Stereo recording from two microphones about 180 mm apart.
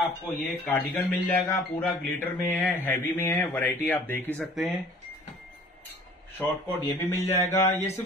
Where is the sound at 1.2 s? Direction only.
15° left (ahead or behind).